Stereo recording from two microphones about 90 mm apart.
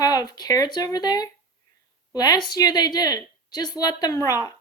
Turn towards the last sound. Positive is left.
turn(degrees=45)  # may be behind; listen again after turning